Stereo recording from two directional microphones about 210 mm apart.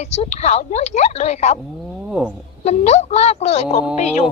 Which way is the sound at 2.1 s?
5° right (ahead or behind).